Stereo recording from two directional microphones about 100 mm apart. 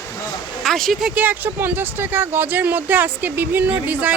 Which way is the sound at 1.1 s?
20° right (ahead or behind).